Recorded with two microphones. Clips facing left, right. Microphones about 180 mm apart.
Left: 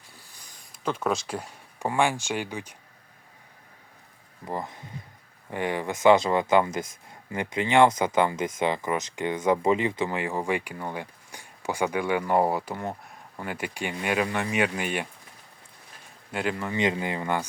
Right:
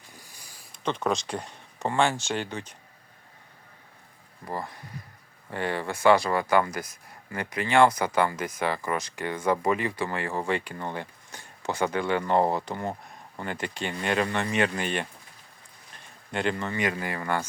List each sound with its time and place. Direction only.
0.2 s a sound: 10° right (ahead or behind)
0.7 s speech: 5° left (ahead or behind)
4.4 s speech: 20° left (ahead or behind)
16.3 s speech: 5° left (ahead or behind)
16.7 s speech: 20° left (ahead or behind)